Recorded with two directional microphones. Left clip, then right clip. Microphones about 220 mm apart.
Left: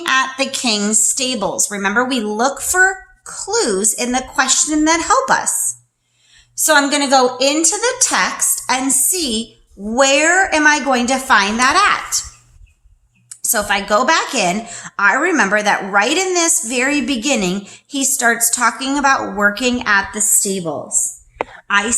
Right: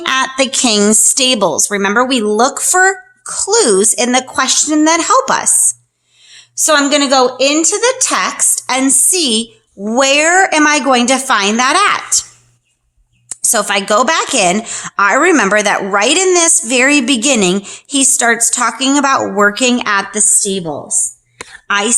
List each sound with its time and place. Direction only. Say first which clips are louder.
0.0 s speech: right 3 dB; 40° right (ahead or behind)
13.3 s a woman's voice: right 4 dB; 45° right (ahead or behind)